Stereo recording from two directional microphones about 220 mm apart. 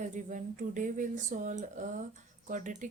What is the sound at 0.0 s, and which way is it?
Speech, 35° right (ahead or behind).